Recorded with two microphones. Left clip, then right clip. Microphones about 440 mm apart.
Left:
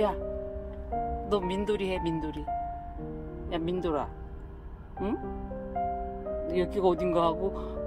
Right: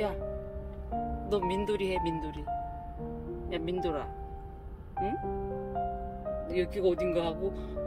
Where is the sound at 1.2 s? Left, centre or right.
Centre.